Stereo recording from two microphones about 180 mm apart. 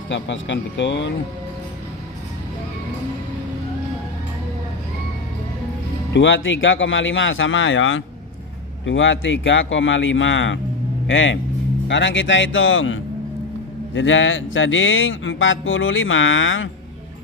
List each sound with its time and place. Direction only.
0.1 s speech: 90° left
6.1 s speech: 90° left